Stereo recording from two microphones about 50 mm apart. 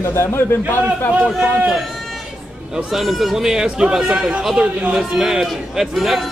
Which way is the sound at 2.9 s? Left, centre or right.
Centre.